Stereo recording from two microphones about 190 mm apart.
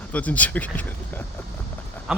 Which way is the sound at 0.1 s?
10° left (ahead or behind).